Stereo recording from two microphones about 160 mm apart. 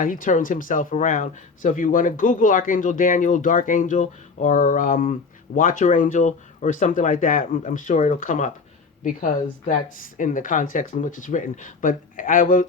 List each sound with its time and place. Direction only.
0.0 s speech: 55° left (ahead or behind)